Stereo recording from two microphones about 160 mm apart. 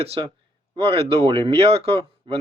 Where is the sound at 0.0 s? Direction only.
40° right (ahead or behind).